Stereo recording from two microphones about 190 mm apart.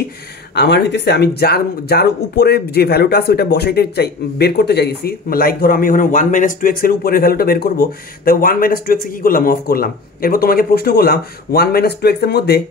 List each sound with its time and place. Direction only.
0.6 s a man's voice: 65° left (ahead or behind)